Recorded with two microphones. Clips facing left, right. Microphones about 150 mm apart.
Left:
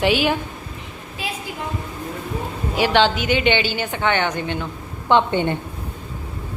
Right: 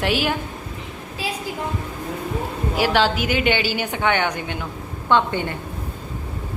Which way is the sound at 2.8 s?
5° right (ahead or behind).